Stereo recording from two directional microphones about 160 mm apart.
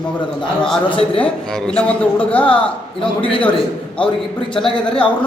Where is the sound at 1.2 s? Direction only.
5° left (ahead or behind).